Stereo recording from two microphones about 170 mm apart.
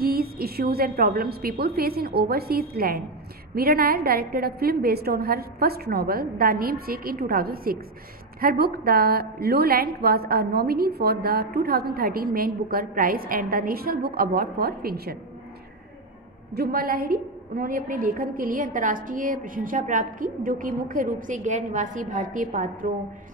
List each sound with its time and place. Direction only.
0.0 s a woman's voice: 60° right (ahead or behind)
16.5 s a woman's voice: 65° right (ahead or behind)